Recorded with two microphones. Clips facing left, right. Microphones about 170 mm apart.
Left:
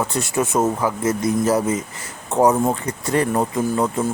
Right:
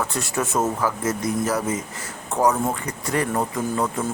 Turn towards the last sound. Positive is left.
turn(degrees=20)  # may be behind; listen again after turning